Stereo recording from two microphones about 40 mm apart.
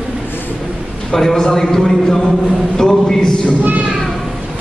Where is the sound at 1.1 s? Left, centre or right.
Centre.